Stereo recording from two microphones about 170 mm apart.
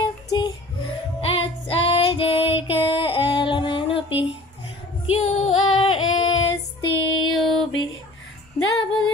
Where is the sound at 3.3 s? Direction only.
30° left (ahead or behind).